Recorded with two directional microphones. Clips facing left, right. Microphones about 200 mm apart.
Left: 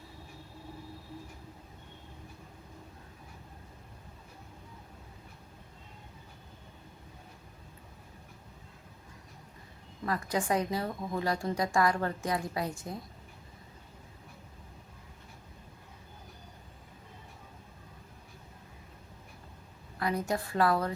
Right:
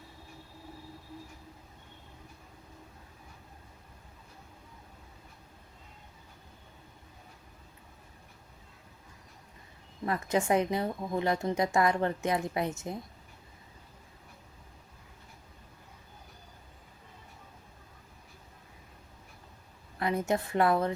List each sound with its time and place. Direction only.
10.1 s a woman's voice: 25° right (ahead or behind)
20.0 s a woman's voice: 25° right (ahead or behind)